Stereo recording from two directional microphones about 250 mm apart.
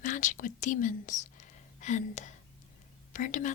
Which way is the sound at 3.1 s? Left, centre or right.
Left.